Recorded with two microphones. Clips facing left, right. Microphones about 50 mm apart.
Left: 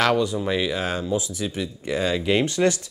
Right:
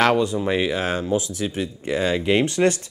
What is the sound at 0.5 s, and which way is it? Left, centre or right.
Speech, right.